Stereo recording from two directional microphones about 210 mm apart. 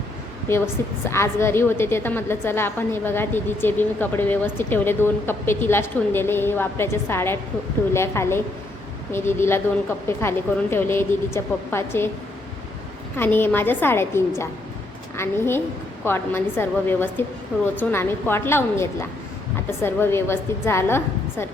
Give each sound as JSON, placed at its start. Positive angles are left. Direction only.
{"t": 0.4, "sound": "a woman's voice", "side_deg": 10}
{"t": 13.1, "sound": "a woman's voice", "side_deg": 10}